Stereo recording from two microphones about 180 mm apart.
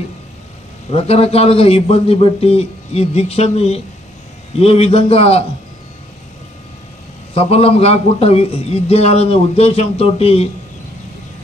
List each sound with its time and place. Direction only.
0.9 s a man's voice: 35° left (ahead or behind)
7.3 s a man's voice: 35° left (ahead or behind)